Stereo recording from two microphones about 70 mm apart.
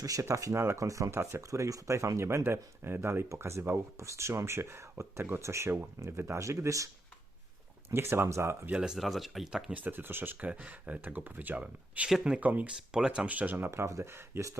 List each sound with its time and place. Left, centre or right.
0.0 s speech: right
7.9 s speech: right
9.0 s speech: centre
9.7 s speech: right
10.3 s speech: centre
12.4 s speech: right
12.9 s speech: centre
13.7 s speech: right